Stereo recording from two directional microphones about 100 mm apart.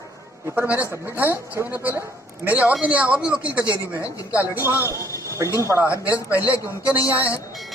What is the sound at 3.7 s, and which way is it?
A woman's voice, 30° left (ahead or behind).